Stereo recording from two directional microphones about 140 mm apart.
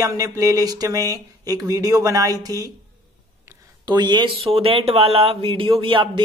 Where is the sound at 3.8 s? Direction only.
30° right (ahead or behind).